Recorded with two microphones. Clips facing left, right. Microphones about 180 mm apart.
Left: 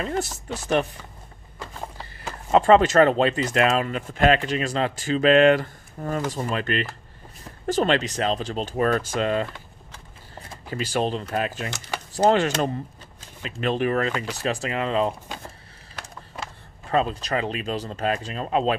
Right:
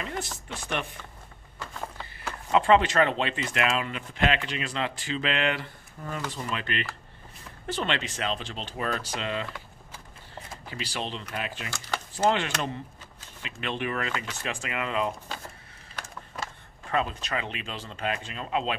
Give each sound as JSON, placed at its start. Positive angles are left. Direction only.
{"t": 0.0, "sound": "speech", "side_deg": 40}
{"t": 2.5, "sound": "speech", "side_deg": 40}
{"t": 10.7, "sound": "speech", "side_deg": 45}
{"t": 16.9, "sound": "speech", "side_deg": 35}